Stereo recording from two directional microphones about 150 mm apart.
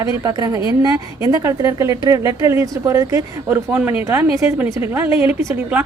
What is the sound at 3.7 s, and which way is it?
Speech, 10° right (ahead or behind).